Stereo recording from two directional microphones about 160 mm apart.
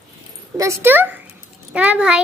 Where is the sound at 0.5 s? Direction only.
15° right (ahead or behind).